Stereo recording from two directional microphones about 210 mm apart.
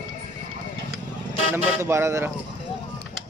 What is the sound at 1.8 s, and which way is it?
Speech, 15° right (ahead or behind).